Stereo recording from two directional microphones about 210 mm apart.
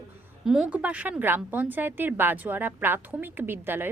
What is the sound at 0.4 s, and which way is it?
Speech, centre (ahead or behind).